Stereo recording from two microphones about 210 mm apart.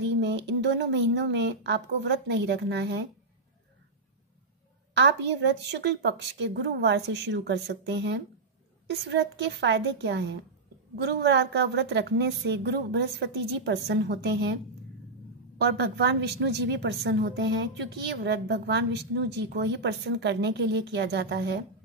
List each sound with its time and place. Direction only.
0.0 s a woman's voice: 55° right (ahead or behind)
4.9 s a woman's voice: 55° right (ahead or behind)